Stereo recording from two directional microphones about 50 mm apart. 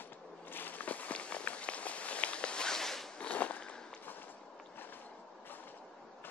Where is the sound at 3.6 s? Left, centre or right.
Centre.